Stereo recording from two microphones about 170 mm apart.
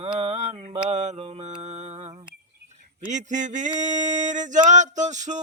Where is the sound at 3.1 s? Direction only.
45° right (ahead or behind).